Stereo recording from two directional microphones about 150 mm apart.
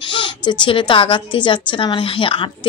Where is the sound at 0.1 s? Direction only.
30° left (ahead or behind).